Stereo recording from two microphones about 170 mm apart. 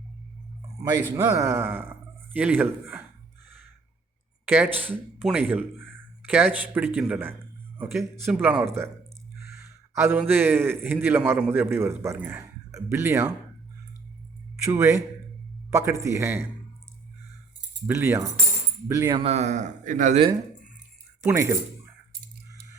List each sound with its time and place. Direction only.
0.8 s a man's voice: 25° right (ahead or behind)
4.4 s a man's voice: 10° right (ahead or behind)
14.6 s speech: 20° right (ahead or behind)
17.8 s speech: 15° right (ahead or behind)
19.2 s speech: 40° right (ahead or behind)
21.2 s speech: 15° right (ahead or behind)